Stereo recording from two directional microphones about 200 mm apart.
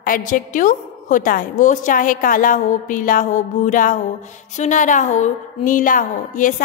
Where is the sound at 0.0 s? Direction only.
45° left (ahead or behind).